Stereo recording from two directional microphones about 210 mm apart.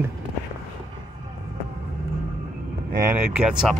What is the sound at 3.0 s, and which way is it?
Speech, 5° right (ahead or behind).